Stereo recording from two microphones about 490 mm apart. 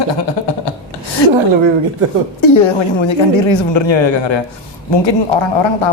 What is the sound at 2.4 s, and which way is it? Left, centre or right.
A woman's voice, left.